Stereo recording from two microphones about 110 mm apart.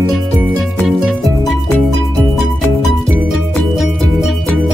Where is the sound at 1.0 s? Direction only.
Centre (ahead or behind).